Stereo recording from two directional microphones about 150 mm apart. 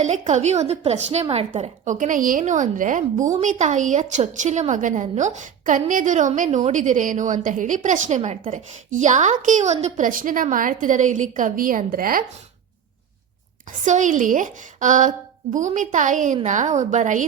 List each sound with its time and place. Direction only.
0.0 s a woman's voice: 50° right (ahead or behind)
10.1 s a woman's voice: 65° right (ahead or behind)
13.7 s a woman's voice: 55° right (ahead or behind)